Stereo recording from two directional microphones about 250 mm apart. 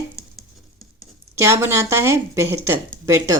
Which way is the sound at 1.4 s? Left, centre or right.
Centre.